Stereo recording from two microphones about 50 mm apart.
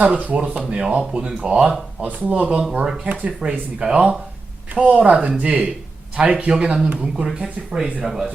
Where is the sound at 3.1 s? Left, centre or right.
Right.